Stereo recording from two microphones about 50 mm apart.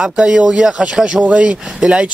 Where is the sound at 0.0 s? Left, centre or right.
Centre.